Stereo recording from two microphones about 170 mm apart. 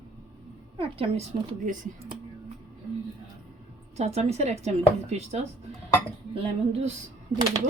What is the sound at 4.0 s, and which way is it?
Speech, 40° right (ahead or behind).